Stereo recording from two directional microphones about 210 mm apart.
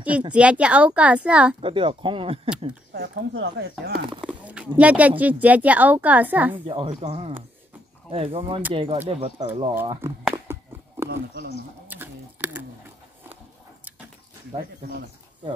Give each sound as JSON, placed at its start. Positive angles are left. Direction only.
{"t": 0.3, "sound": "speech", "side_deg": -5}
{"t": 1.6, "sound": "speech", "side_deg": -25}
{"t": 2.9, "sound": "speech", "side_deg": -45}
{"t": 3.3, "sound": "speech", "side_deg": -60}
{"t": 4.2, "sound": "speech", "side_deg": -5}
{"t": 6.5, "sound": "speech", "side_deg": -25}
{"t": 10.0, "sound": "a sound", "side_deg": -10}
{"t": 11.1, "sound": "speech", "side_deg": -55}
{"t": 11.9, "sound": "a sound", "side_deg": -10}
{"t": 14.5, "sound": "speech", "side_deg": -20}